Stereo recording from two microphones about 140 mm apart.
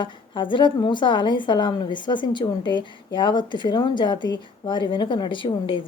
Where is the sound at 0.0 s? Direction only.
35° left (ahead or behind).